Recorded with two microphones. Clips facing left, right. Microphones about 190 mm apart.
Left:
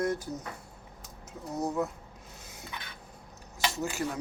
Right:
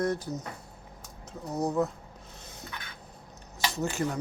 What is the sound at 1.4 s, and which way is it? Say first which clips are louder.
Speech: right 3 dB; 20° right (ahead or behind).